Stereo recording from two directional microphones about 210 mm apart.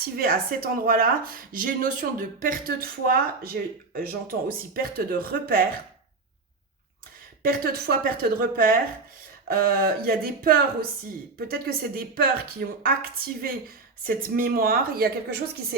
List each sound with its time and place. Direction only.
0.2 s speech: 45° right (ahead or behind)
7.4 s speech: 45° right (ahead or behind)